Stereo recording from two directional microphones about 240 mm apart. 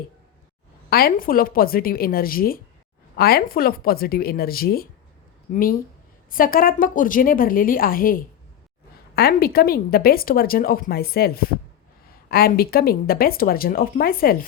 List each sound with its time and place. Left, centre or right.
0.9 s speech: left